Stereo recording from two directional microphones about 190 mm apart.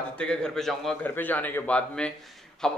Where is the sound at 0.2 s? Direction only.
5° left (ahead or behind).